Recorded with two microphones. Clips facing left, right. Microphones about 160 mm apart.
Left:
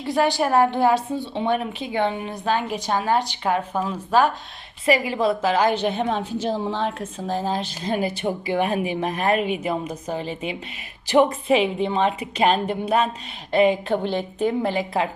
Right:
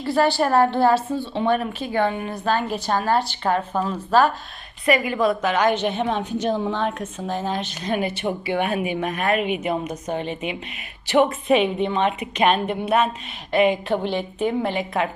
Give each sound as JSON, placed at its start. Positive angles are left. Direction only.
{"t": 0.0, "sound": "a woman's voice", "side_deg": 15}
{"t": 4.9, "sound": "a woman's voice", "side_deg": 25}